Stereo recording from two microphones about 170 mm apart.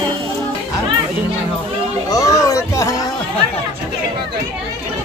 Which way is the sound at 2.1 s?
20° left (ahead or behind).